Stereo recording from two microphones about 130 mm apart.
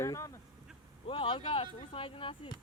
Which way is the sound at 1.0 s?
45° left (ahead or behind).